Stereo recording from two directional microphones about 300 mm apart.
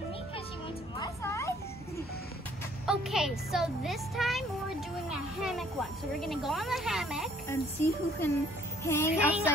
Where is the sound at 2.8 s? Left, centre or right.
Centre.